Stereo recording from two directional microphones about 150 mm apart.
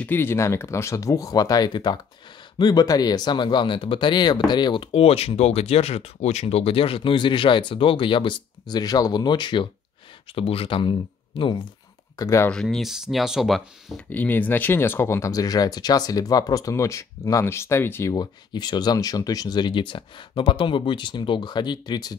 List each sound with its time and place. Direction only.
0.0 s speech: 15° left (ahead or behind); by 11.6 s 35° left (ahead or behind)
12.2 s speech: 20° left (ahead or behind)
12.4 s speech: 5° left (ahead or behind)
14.0 s speech: 10° left (ahead or behind)
18.1 s speech: 30° left (ahead or behind)